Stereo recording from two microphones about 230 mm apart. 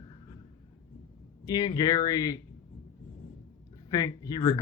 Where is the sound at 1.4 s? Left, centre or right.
Centre.